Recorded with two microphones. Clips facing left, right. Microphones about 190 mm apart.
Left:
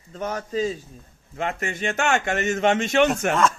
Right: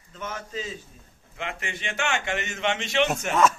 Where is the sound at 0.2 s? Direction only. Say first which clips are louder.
Left 9 dB; 40° left (ahead or behind).